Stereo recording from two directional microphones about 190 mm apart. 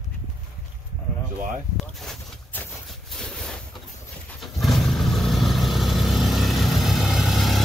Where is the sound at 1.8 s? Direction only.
Centre (ahead or behind).